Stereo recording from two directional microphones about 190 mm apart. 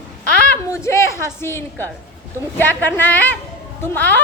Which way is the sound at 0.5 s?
15° left (ahead or behind).